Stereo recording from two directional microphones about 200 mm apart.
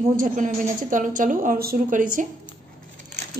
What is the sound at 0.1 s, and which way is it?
A woman's voice, 40° right (ahead or behind).